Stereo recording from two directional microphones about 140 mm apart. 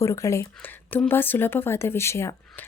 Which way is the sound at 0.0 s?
20° left (ahead or behind).